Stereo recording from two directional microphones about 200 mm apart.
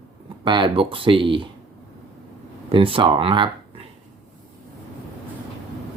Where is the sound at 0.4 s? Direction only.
25° right (ahead or behind).